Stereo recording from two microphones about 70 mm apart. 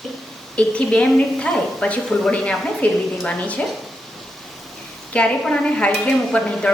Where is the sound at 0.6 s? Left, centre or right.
Centre.